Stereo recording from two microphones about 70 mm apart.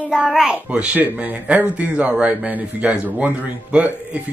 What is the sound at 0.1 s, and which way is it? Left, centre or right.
A child's voice, centre.